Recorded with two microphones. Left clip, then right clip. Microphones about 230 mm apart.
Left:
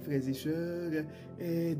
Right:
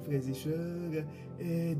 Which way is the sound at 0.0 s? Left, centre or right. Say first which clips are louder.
Left 2 dB; left.